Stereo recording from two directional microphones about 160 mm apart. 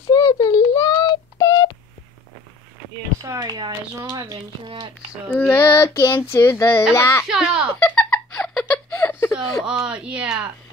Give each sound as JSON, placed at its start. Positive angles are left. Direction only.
{"t": 0.1, "sound": "child singing", "side_deg": 20}
{"t": 3.2, "sound": "speech", "side_deg": -25}
{"t": 5.3, "sound": "child singing", "side_deg": 15}
{"t": 7.2, "sound": "a child's voice", "side_deg": -5}
{"t": 7.8, "sound": "giggle", "side_deg": 5}
{"t": 9.7, "sound": "speech", "side_deg": -5}